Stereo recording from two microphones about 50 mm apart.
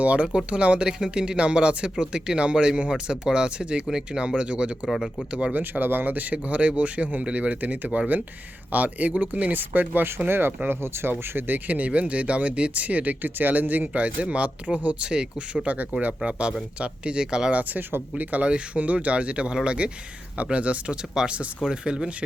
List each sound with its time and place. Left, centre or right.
0.0 s speech: right
4.9 s speech: centre
5.3 s speech: right
5.5 s speech: right
11.2 s speech: right; by 17.5 s centre
17.5 s speech: right; by 22.1 s centre